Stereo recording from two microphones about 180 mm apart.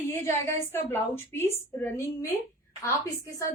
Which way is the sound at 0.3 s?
15° left (ahead or behind).